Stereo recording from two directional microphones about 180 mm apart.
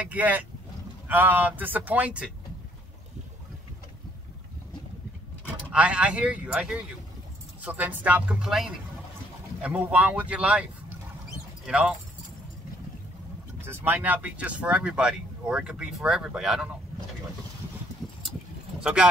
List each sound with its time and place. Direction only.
0.0 s speech: 10° right (ahead or behind)
5.7 s speech: 5° right (ahead or behind)
13.7 s speech: 10° right (ahead or behind)
18.8 s speech: 5° right (ahead or behind)